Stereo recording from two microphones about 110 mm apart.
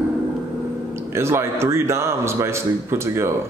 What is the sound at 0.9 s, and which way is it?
A man's voice, 25° right (ahead or behind).